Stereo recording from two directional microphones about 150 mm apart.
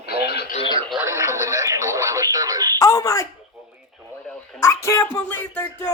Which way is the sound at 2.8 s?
20° left (ahead or behind).